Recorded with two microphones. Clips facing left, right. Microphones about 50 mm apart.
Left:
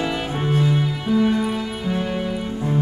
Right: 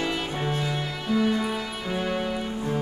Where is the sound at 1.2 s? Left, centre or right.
Centre.